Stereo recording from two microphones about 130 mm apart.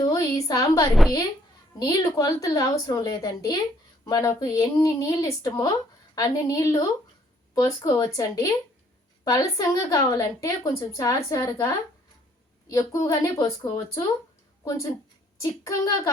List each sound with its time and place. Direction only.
0.0 s a woman's voice: 25° left (ahead or behind)
7.9 s a woman's voice: 30° left (ahead or behind)